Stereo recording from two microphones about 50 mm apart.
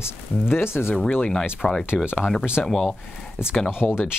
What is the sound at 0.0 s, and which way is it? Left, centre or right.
Speech, left.